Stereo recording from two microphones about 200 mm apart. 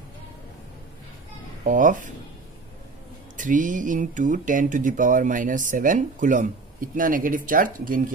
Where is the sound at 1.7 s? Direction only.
40° right (ahead or behind).